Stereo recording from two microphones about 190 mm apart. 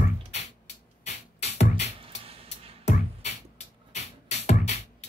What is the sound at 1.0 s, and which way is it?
Music, 35° left (ahead or behind).